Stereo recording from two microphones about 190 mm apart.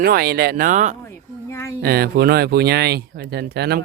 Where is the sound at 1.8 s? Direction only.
55° right (ahead or behind).